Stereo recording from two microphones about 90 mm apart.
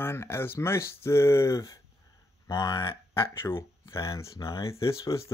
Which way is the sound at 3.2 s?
30° left (ahead or behind).